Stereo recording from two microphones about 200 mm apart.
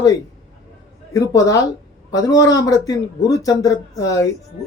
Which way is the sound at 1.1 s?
15° left (ahead or behind).